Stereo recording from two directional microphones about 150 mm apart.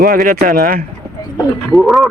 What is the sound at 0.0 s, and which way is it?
Speech, 80° right.